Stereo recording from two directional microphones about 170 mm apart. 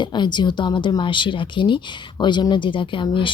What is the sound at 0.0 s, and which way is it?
Speech, 25° left (ahead or behind).